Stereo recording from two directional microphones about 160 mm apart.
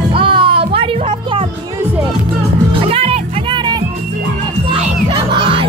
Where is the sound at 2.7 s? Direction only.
35° right (ahead or behind).